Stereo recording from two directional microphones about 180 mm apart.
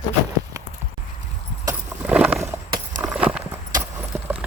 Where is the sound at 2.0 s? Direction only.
5° right (ahead or behind).